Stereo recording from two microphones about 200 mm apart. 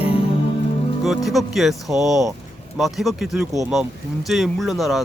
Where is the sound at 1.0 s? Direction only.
Centre (ahead or behind).